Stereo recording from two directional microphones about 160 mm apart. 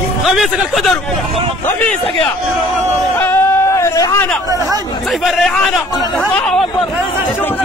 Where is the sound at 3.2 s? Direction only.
15° left (ahead or behind).